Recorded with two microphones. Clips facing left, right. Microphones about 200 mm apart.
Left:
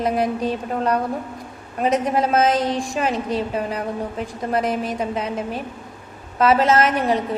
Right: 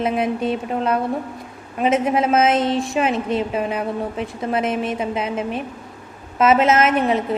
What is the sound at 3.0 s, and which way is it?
A woman's voice, 35° left (ahead or behind).